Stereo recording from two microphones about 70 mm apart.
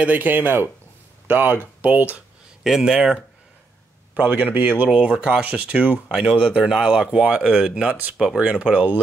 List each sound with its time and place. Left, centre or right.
0.0 s speech: right
2.6 s speech: centre
4.1 s speech: right